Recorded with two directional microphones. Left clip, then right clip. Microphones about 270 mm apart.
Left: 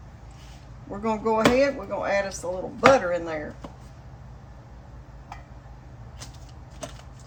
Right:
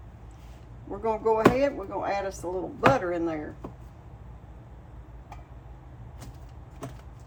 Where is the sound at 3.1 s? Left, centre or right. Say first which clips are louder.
Left 2 dB; left.